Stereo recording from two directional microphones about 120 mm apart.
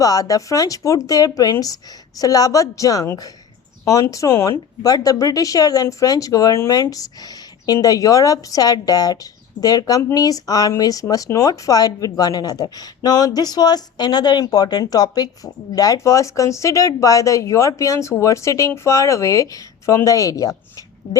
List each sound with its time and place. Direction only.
0.0 s speech: 30° left (ahead or behind)